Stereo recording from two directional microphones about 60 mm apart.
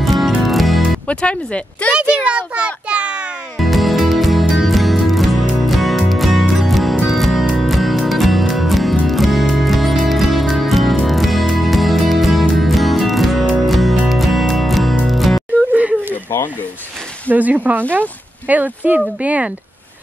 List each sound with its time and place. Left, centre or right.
0.0 s music: centre
1.0 s speech: left
1.9 s a child's voice: centre
3.5 s music: centre
15.7 s a sound: right
17.3 s speech: right